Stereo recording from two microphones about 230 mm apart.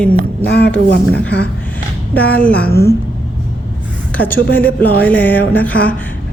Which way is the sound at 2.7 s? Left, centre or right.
Left.